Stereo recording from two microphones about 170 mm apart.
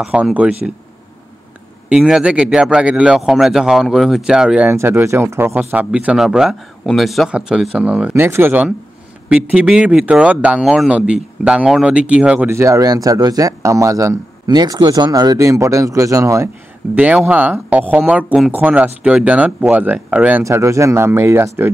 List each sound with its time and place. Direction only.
0.0 s speech: 5° right (ahead or behind)
1.9 s a man's voice: 5° right (ahead or behind)
4.6 s speech: 15° right (ahead or behind)
16.9 s speech: 10° right (ahead or behind)